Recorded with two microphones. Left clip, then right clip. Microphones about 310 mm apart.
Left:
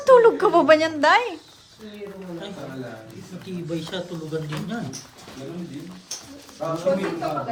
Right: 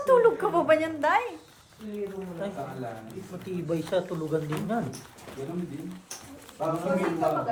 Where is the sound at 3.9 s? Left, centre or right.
Centre.